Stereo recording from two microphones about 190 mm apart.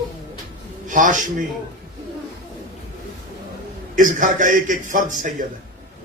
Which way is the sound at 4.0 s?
45° right (ahead or behind).